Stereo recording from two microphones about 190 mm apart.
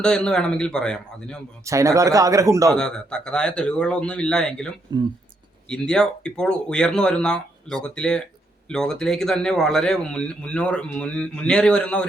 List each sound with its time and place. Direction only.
0.0 s a man's voice: 5° left (ahead or behind)
1.6 s speech: 15° right (ahead or behind)
2.7 s a man's voice: 5° left (ahead or behind)
4.9 s speech: 20° right (ahead or behind)
5.6 s a man's voice: 5° left (ahead or behind)